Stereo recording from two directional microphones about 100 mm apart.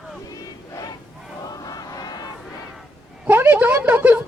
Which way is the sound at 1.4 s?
40° left (ahead or behind).